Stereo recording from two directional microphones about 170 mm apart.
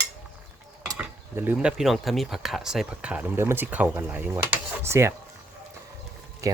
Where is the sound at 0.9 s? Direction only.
10° right (ahead or behind).